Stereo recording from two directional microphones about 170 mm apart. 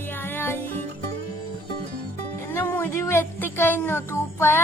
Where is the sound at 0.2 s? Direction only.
10° left (ahead or behind).